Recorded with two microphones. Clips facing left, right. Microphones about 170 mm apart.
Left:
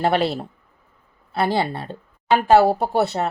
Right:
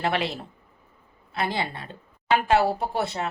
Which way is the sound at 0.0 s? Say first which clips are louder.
Left 7 dB; 35° left (ahead or behind).